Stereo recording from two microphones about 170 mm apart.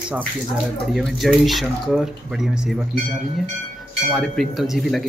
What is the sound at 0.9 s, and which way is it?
Speech, centre (ahead or behind).